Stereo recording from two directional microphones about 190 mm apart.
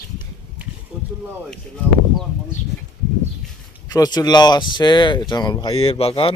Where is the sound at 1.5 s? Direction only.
5° left (ahead or behind).